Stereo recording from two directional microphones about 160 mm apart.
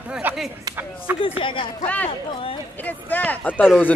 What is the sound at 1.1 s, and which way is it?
Speech, 35° left (ahead or behind).